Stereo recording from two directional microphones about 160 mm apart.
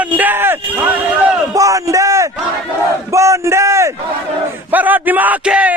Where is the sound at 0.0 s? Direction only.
10° right (ahead or behind).